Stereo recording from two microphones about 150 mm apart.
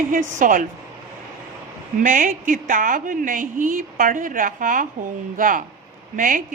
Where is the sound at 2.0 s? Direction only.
60° right (ahead or behind).